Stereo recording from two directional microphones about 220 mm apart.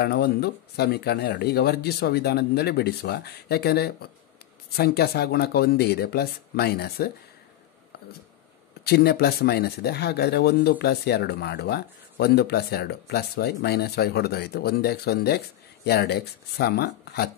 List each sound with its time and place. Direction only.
0.0 s speech: 45° left (ahead or behind)
8.8 s speech: 45° left (ahead or behind)